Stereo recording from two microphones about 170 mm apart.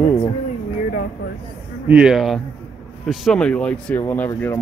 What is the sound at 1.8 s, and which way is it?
A man's voice, 5° right (ahead or behind).